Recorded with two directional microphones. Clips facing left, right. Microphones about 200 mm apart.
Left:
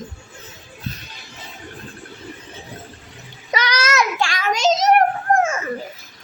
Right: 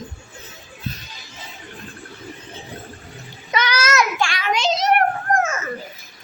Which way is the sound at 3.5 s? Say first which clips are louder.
Even; 35° left (ahead or behind).